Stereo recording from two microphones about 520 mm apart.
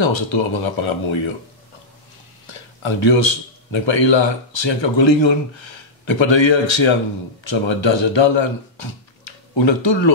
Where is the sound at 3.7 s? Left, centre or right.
Left.